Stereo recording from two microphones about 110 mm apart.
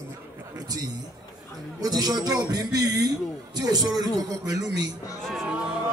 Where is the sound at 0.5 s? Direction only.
35° right (ahead or behind).